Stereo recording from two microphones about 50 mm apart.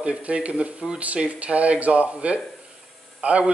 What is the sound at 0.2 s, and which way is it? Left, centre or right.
Speech, right.